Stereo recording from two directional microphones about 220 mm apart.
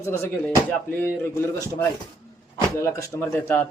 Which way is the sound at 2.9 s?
10° left (ahead or behind).